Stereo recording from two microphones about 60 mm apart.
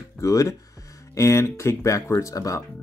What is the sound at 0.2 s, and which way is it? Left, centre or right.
Speech, left.